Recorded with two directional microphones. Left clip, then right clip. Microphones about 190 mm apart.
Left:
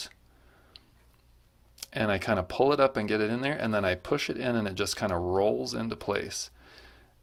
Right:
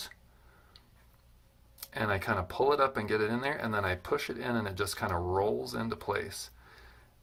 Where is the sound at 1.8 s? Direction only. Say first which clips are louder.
Left 3 dB; 35° left (ahead or behind).